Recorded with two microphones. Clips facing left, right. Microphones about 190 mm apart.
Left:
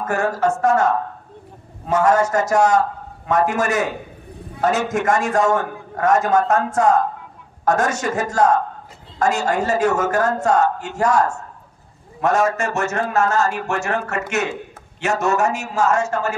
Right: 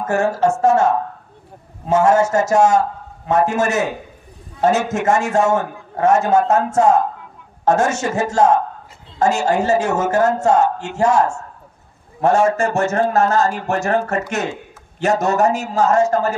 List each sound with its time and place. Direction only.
0.0 s a man's voice: 25° right (ahead or behind)